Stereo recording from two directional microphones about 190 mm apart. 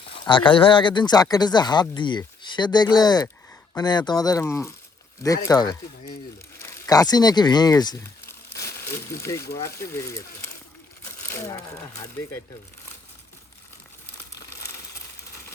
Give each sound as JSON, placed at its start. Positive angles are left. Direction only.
{"t": 0.1, "sound": "speech", "side_deg": 25}